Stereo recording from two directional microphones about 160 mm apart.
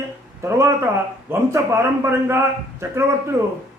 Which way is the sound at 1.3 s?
20° right (ahead or behind).